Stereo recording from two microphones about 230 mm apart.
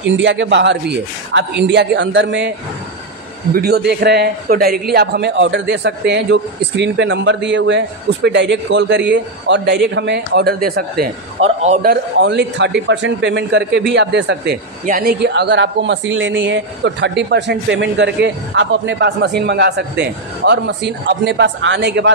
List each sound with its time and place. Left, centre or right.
0.0 s a man's voice: right
3.5 s a man's voice: right
11.4 s a man's voice: right